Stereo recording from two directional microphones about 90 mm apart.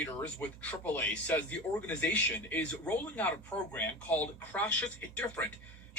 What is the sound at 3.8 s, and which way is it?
Speech, 20° left (ahead or behind).